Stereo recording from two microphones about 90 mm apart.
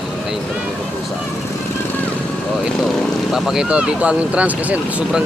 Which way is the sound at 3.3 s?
5° right (ahead or behind).